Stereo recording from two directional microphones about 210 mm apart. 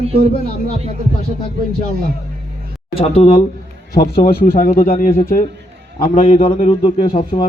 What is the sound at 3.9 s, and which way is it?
Speech, 50° left (ahead or behind).